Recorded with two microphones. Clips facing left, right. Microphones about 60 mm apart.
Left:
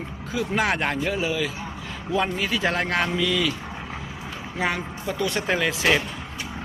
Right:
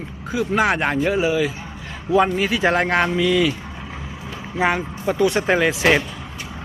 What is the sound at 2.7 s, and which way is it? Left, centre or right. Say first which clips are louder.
Speech: right 5 dB; right.